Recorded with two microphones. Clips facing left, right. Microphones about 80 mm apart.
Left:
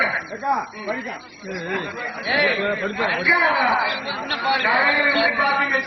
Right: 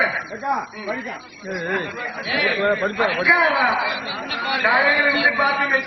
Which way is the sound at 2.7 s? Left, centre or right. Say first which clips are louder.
Right 3 dB; right.